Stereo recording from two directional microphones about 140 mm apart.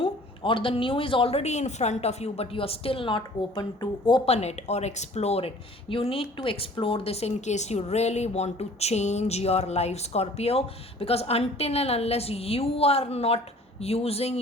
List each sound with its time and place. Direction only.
0.0 s speech: 40° left (ahead or behind)
4.3 s a woman's voice: 50° left (ahead or behind)